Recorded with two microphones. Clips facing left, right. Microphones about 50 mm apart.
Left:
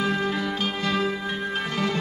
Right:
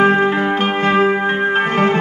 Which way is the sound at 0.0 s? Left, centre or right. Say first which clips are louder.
Right 12 dB; right.